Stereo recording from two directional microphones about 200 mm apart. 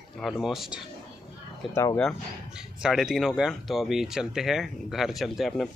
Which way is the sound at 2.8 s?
5° right (ahead or behind).